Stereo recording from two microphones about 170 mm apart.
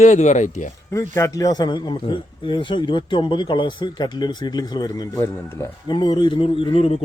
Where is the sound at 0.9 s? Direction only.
15° left (ahead or behind).